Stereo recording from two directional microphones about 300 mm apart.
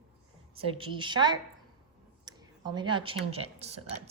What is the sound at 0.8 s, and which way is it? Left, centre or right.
A woman's voice, centre.